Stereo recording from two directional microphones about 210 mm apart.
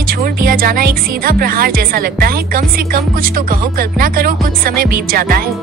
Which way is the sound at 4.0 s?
45° right (ahead or behind).